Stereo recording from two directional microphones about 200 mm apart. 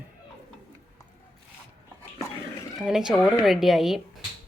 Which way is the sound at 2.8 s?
5° right (ahead or behind).